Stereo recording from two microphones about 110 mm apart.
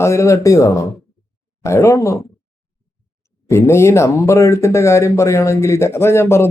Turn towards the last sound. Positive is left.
turn(degrees=25)  # may be behind; listen again after turning